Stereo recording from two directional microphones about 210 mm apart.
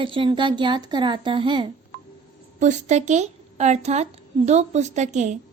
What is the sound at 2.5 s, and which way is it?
A woman's voice, 35° right (ahead or behind).